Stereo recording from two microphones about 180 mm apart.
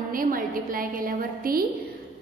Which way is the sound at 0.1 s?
50° right (ahead or behind).